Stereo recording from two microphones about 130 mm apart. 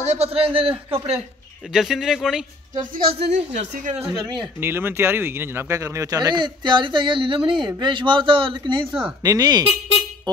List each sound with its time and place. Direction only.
0.0 s a man's voice: 55° right (ahead or behind)
1.7 s speech: 5° right (ahead or behind)
3.0 s speech: 50° right (ahead or behind)
4.6 s speech: 15° right (ahead or behind)